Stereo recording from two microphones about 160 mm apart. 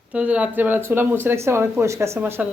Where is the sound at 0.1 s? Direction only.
10° right (ahead or behind).